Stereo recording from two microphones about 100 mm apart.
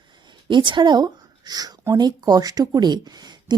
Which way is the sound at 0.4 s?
55° right (ahead or behind).